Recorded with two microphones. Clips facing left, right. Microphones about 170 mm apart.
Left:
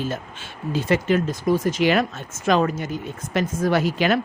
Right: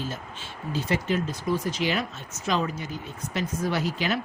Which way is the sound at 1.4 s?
45° left (ahead or behind).